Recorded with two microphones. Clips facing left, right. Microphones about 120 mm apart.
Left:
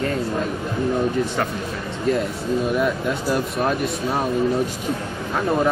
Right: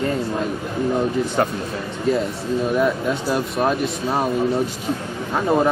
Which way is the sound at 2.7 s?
Centre (ahead or behind).